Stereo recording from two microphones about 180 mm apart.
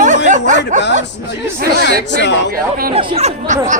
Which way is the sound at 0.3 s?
45° right (ahead or behind).